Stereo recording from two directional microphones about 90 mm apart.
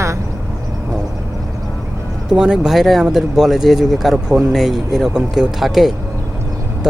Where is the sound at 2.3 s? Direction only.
10° right (ahead or behind).